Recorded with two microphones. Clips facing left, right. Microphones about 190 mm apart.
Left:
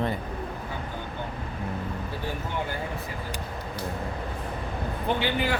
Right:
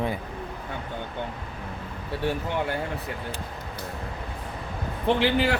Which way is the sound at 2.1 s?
70° right (ahead or behind).